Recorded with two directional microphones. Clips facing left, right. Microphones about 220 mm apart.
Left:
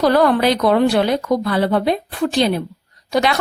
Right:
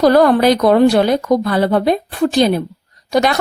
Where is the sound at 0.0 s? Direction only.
40° right (ahead or behind).